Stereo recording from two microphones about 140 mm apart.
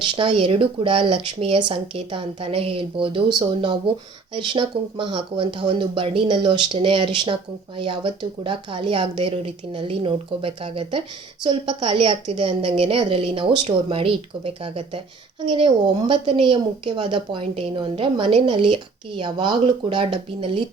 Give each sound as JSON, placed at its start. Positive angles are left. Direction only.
{"t": 0.4, "sound": "speech", "side_deg": -40}